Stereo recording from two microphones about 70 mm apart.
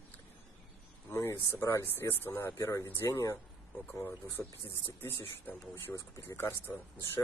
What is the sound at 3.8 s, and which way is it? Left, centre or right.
Speech, left.